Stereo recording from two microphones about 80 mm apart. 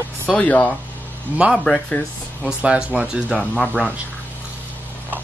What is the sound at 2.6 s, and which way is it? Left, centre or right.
Speech, centre.